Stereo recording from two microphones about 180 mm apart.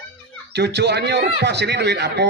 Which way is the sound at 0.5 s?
70° right (ahead or behind).